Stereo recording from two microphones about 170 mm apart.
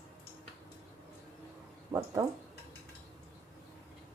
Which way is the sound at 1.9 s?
20° right (ahead or behind).